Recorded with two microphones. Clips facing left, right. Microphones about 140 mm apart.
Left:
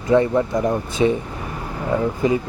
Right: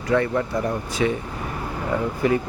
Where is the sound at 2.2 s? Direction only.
20° left (ahead or behind).